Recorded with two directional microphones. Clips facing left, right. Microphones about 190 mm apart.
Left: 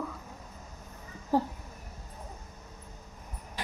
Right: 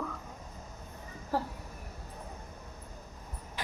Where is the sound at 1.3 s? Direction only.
15° left (ahead or behind).